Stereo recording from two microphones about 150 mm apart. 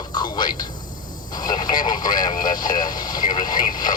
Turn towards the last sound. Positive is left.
turn(degrees=30)  # may be behind; listen again after turning